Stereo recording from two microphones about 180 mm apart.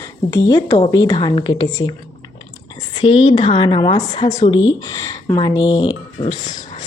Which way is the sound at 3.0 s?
30° left (ahead or behind).